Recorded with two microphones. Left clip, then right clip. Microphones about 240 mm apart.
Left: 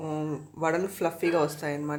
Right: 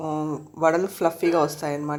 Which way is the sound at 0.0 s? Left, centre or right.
Centre.